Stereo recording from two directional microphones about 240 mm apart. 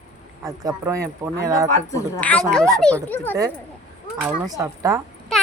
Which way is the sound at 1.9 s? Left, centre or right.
Centre.